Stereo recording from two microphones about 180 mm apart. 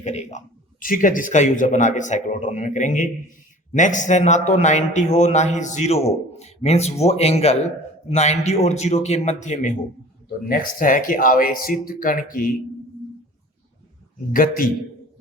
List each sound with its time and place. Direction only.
0.0 s a man's voice: 40° left (ahead or behind)
14.3 s speech: 50° left (ahead or behind)